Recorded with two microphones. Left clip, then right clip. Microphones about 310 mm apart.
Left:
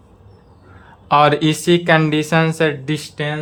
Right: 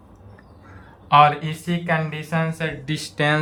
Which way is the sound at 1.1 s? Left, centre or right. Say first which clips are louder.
Left 2 dB; centre.